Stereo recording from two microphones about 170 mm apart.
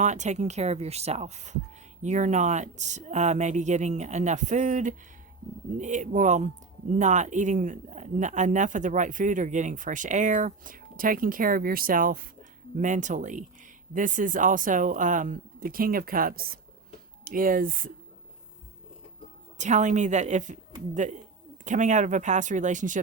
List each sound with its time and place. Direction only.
0.0 s a man's voice: 45° right (ahead or behind)
19.5 s a man's voice: 45° right (ahead or behind)